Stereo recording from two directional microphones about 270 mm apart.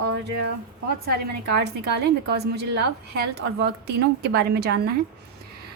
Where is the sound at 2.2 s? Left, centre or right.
Right.